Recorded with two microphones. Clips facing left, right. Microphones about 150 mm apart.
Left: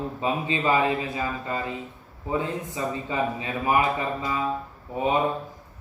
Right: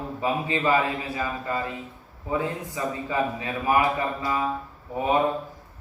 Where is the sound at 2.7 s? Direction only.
20° left (ahead or behind).